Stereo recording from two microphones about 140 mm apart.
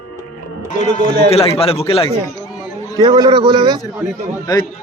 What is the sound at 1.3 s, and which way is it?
Speech, 45° left (ahead or behind).